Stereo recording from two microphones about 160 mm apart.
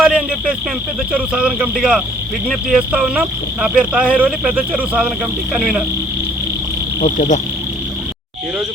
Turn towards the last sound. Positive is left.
turn(degrees=50)  # may be behind; listen again after turning